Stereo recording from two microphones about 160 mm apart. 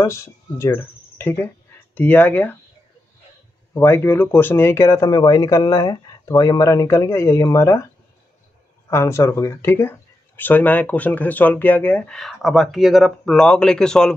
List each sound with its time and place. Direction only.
0.0 s speech: 15° left (ahead or behind)
3.7 s speech: 15° left (ahead or behind)
8.9 s speech: 15° left (ahead or behind)